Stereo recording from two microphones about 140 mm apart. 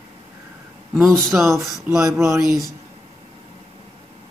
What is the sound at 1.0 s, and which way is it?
Speech, centre (ahead or behind).